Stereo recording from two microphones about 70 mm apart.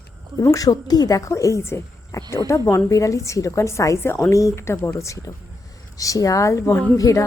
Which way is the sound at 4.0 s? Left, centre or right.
Left.